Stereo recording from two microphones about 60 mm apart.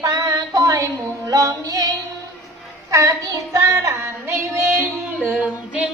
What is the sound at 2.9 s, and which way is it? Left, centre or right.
Child singing, right.